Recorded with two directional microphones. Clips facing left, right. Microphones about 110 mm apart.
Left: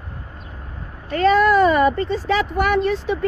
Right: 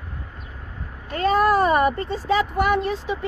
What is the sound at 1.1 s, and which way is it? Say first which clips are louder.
Vehicle: left 4 dB; 90° left.